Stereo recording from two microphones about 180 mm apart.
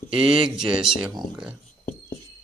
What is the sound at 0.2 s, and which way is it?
Speech, 5° right (ahead or behind).